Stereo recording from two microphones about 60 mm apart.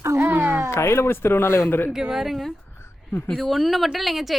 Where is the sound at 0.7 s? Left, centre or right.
Left.